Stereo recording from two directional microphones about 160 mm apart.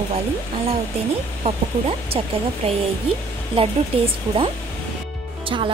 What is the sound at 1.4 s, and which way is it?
Speech, 35° right (ahead or behind).